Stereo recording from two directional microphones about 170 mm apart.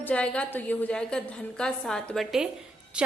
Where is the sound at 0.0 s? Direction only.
5° left (ahead or behind).